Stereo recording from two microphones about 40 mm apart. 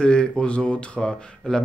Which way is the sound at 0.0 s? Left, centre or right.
Left.